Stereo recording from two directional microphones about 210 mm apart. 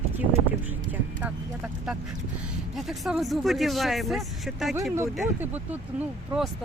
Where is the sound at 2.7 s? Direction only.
Centre (ahead or behind).